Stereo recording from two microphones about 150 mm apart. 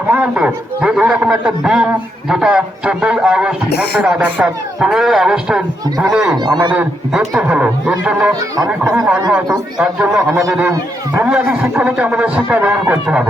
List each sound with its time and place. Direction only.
0.1 s speech: 5° right (ahead or behind)
6.4 s a man's voice: 30° right (ahead or behind)
6.7 s speech: 5° right (ahead or behind)